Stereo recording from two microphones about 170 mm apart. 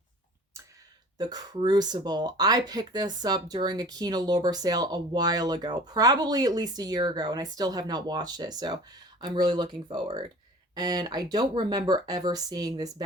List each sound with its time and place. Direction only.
1.2 s speech: 25° right (ahead or behind)